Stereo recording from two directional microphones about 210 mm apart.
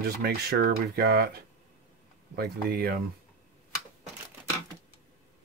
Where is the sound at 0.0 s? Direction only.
45° right (ahead or behind).